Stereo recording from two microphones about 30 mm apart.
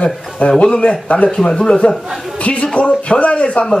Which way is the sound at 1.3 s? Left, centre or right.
Left.